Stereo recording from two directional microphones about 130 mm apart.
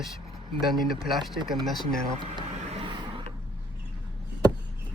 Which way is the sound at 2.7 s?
50° right (ahead or behind).